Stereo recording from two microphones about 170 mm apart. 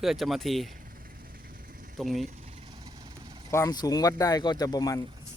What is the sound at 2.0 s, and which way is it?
Speech, centre (ahead or behind).